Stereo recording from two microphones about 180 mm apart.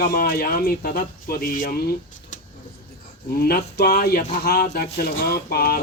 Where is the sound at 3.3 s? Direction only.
60° left (ahead or behind).